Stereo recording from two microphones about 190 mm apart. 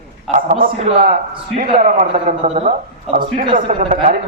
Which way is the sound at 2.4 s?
35° right (ahead or behind).